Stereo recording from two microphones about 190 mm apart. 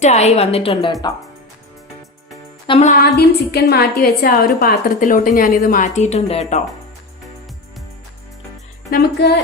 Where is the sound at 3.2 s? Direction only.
60° left (ahead or behind); by 6.6 s 35° left (ahead or behind).